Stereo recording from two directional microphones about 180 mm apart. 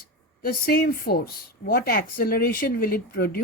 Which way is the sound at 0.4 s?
55° left (ahead or behind).